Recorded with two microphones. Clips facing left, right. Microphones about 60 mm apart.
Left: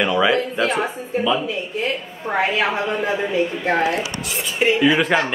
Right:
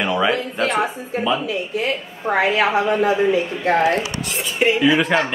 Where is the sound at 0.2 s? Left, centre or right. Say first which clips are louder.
Left 1 dB; centre.